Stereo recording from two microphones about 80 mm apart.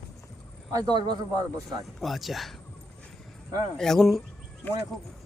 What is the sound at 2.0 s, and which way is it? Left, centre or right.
Speech, centre.